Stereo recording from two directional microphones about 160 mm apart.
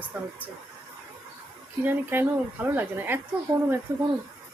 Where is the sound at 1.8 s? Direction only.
15° right (ahead or behind).